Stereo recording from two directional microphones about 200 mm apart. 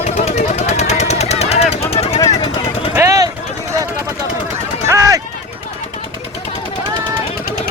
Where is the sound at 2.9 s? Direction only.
15° right (ahead or behind).